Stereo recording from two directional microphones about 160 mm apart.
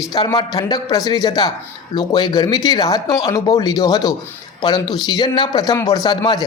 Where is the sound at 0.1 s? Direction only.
25° left (ahead or behind).